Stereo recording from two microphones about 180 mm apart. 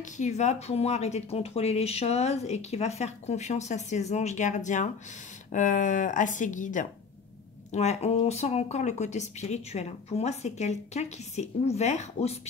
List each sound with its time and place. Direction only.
0.2 s speech: 40° left (ahead or behind)